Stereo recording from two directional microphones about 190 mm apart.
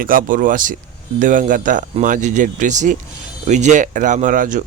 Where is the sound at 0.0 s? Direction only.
45° right (ahead or behind).